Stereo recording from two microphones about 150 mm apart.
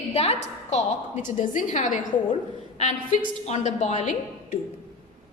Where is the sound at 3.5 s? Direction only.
50° left (ahead or behind).